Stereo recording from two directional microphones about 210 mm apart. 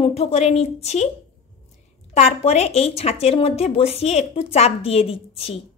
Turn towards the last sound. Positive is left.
turn(degrees=25)  # may be behind; listen again after turning